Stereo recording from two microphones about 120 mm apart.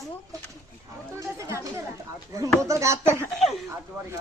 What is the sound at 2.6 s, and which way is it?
Speech, 25° right (ahead or behind).